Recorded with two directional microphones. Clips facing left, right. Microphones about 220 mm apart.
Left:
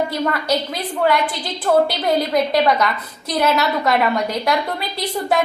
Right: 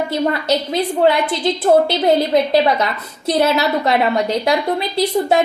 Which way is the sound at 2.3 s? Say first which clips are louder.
Right 3 dB; 30° right (ahead or behind).